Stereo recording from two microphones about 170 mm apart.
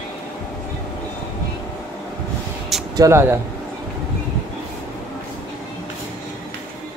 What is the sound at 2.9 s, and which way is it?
Speech, 15° right (ahead or behind).